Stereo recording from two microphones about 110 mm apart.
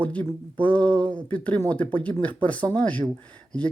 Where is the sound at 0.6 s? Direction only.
15° left (ahead or behind).